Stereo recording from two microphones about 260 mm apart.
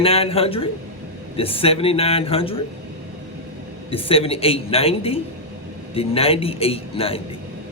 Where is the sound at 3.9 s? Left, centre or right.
Left.